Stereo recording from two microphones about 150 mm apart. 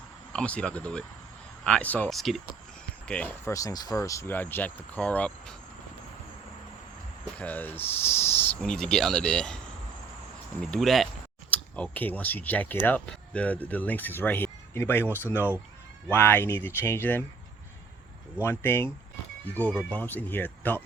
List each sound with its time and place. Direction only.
0.3 s speech: 10° left (ahead or behind)
3.5 s speech: 25° left (ahead or behind)
7.3 s speech: 10° left (ahead or behind)
8.6 s speech: 5° left (ahead or behind)
10.6 s speech: 5° left (ahead or behind)
11.5 s speech: 10° left (ahead or behind)
18.4 s speech: 15° left (ahead or behind)